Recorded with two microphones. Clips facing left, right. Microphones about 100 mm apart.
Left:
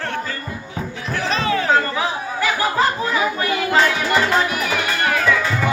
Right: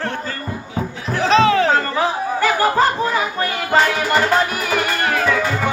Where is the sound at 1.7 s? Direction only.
40° right (ahead or behind).